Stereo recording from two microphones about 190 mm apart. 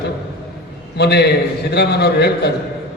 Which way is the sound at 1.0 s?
60° left (ahead or behind).